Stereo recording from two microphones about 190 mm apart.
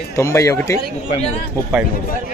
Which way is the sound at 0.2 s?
15° left (ahead or behind).